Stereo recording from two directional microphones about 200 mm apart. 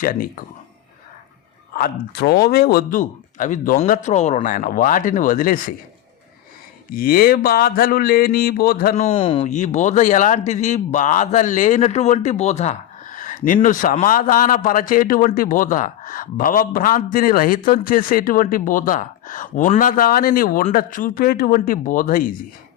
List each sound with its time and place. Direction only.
0.0 s speech: 45° left (ahead or behind)
1.7 s speech: 50° left (ahead or behind)
6.9 s speech: 45° left (ahead or behind)
9.0 s speech: 25° left (ahead or behind); by 22.3 s 45° left (ahead or behind)